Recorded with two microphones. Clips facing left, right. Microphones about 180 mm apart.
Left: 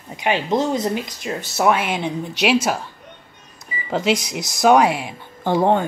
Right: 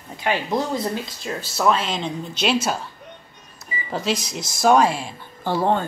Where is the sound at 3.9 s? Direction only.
15° left (ahead or behind).